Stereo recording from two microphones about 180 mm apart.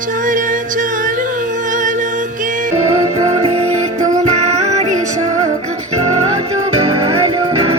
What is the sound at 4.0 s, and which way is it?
Music, 40° right (ahead or behind).